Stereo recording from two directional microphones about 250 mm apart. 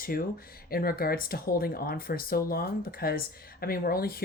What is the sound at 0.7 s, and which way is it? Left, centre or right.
Speech, left.